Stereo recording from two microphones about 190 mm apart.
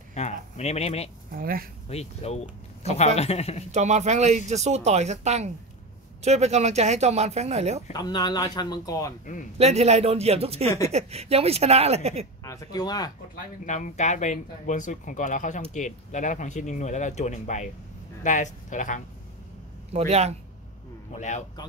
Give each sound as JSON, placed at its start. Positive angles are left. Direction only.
{"t": 0.1, "sound": "speech", "side_deg": 35}
{"t": 1.3, "sound": "speech", "side_deg": -50}
{"t": 1.9, "sound": "speech", "side_deg": 35}
{"t": 3.7, "sound": "speech", "side_deg": -35}
{"t": 7.9, "sound": "speech", "side_deg": 20}
{"t": 9.2, "sound": "a man's voice", "side_deg": 45}
{"t": 9.6, "sound": "speech", "side_deg": -35}
{"t": 12.4, "sound": "speech", "side_deg": 20}
{"t": 13.7, "sound": "speech", "side_deg": 40}
{"t": 19.9, "sound": "speech", "side_deg": -35}